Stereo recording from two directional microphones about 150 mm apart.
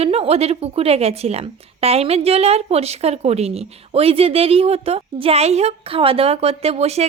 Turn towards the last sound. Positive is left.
turn(degrees=-45)  # may be behind; listen again after turning